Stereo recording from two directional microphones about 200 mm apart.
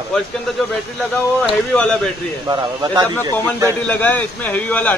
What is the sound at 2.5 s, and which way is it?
Speech, 20° right (ahead or behind).